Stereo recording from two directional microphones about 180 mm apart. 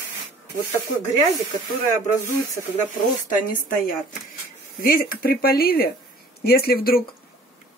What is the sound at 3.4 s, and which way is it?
A woman's voice, 50° left (ahead or behind).